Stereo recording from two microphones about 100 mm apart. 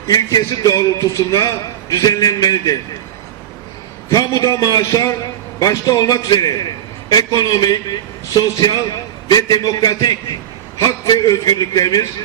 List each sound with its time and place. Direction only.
0.1 s a man's voice: 35° left (ahead or behind)
4.1 s a man's voice: 35° left (ahead or behind)